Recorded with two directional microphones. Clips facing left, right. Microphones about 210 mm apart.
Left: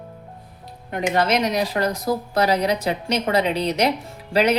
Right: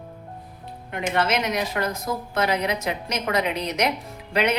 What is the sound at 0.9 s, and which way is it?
A woman's voice, 35° left (ahead or behind).